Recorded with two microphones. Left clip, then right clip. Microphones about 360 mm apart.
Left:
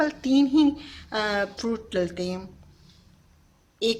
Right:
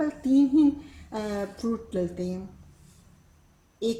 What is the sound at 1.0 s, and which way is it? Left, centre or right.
Speech, left.